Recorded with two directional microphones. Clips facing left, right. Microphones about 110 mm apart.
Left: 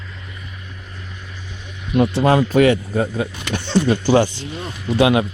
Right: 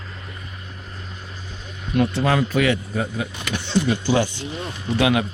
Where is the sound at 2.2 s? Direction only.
35° left (ahead or behind).